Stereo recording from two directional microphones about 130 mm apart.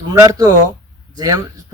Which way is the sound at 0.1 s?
30° right (ahead or behind).